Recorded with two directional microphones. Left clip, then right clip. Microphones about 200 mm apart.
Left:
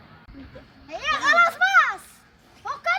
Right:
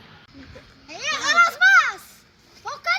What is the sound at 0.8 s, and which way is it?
Children playing, 10° left (ahead or behind).